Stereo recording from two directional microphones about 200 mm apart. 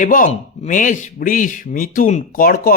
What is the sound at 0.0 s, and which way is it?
Speech, 40° left (ahead or behind).